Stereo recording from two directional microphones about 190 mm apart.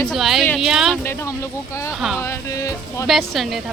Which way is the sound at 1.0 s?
15° left (ahead or behind).